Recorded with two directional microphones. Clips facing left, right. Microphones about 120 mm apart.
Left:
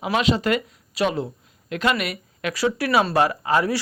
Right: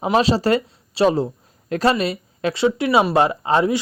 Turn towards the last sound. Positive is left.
turn(degrees=-25)  # may be behind; listen again after turning